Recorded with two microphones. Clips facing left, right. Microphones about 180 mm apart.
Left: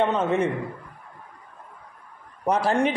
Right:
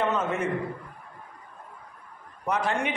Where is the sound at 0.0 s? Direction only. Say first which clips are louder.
Left 5 dB; 30° left (ahead or behind).